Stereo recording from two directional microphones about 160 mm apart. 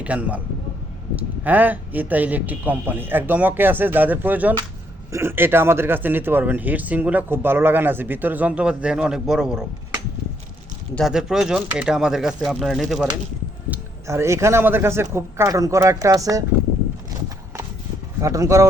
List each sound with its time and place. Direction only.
0.0 s speech: 10° right (ahead or behind)
10.9 s speech: centre (ahead or behind)
13.7 s speech: 15° right (ahead or behind)
18.2 s speech: 20° right (ahead or behind)